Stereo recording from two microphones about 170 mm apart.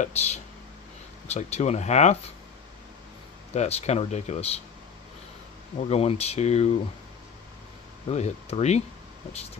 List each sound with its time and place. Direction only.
0.0 s speech: 40° left (ahead or behind)
3.5 s speech: 40° left (ahead or behind)
5.9 s speech: 40° left (ahead or behind)
8.1 s speech: 40° left (ahead or behind)